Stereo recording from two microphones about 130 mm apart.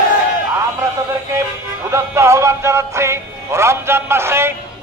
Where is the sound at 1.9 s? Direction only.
20° right (ahead or behind).